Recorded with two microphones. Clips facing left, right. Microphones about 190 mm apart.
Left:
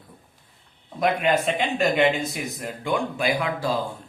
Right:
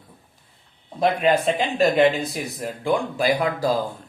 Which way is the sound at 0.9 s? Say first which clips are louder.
Right 2 dB; 30° right (ahead or behind).